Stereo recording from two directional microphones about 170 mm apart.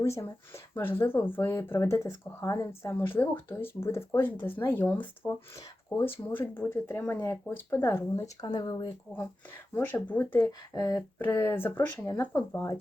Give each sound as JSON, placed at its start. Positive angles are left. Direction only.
{"t": 0.2, "sound": "speech", "side_deg": 15}
{"t": 9.7, "sound": "speech", "side_deg": 10}